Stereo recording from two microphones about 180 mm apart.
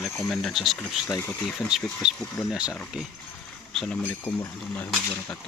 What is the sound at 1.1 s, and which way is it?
Speech, 15° left (ahead or behind).